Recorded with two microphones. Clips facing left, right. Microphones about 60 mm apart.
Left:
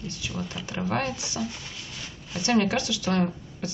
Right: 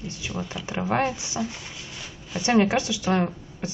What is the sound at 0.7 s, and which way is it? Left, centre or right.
Speech, right.